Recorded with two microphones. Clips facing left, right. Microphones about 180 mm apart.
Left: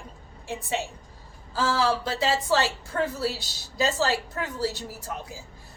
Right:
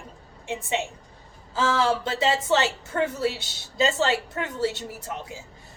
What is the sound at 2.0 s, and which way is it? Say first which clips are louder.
A woman's voice: right 1 dB; 25° right (ahead or behind).